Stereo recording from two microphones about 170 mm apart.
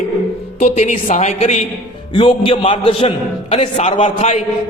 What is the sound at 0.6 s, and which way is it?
A woman's voice, 45° left (ahead or behind).